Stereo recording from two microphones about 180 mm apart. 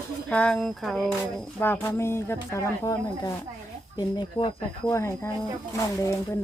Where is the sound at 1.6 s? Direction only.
10° left (ahead or behind).